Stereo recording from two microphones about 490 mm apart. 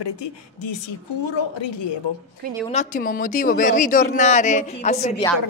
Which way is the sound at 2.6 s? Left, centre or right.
Centre.